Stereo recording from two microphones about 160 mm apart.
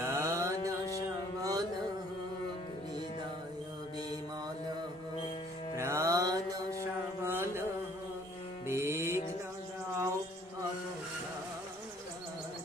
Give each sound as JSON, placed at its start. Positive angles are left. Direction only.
{"t": 0.0, "sound": "mantra", "side_deg": -20}
{"t": 1.4, "sound": "music", "side_deg": -20}
{"t": 5.7, "sound": "music", "side_deg": -20}
{"t": 7.2, "sound": "carnatic music", "side_deg": -15}
{"t": 8.6, "sound": "music", "side_deg": -15}